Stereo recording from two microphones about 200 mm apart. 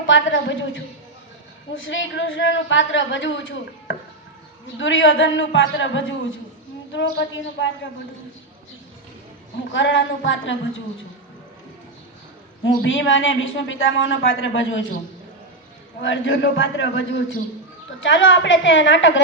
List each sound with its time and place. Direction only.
0.1 s a man's voice: 70° left (ahead or behind)
9.7 s a man's voice: 65° left (ahead or behind)
12.6 s a man's voice: 70° left (ahead or behind)
16.0 s a man's voice: 70° left (ahead or behind)